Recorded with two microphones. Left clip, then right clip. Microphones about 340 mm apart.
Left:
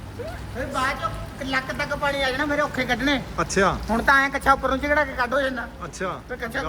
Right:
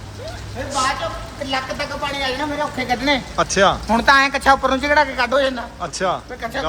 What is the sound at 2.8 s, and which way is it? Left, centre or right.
Speech, centre.